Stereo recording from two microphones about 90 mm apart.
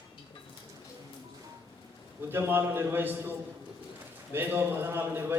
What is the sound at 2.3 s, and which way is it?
A man's voice, 25° right (ahead or behind).